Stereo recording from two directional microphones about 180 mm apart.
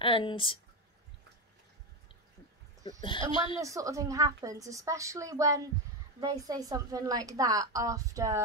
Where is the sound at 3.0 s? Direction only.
30° left (ahead or behind).